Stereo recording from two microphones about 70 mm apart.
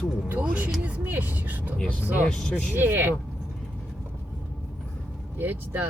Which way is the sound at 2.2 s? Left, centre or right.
Centre.